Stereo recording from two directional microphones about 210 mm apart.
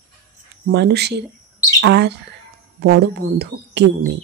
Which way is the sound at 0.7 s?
50° right (ahead or behind).